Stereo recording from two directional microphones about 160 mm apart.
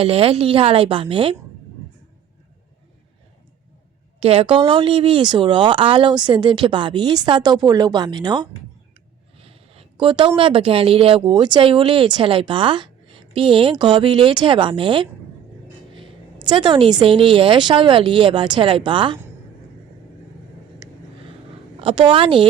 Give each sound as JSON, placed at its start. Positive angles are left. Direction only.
{"t": 0.0, "sound": "speech", "side_deg": -35}
{"t": 4.2, "sound": "speech", "side_deg": -40}
{"t": 21.8, "sound": "speech", "side_deg": -35}